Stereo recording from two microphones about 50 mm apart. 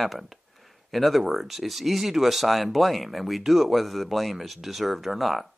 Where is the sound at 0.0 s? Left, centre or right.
Centre.